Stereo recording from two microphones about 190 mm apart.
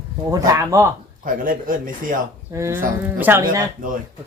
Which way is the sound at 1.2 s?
45° right (ahead or behind).